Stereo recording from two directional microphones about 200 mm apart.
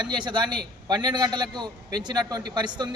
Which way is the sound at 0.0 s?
20° right (ahead or behind).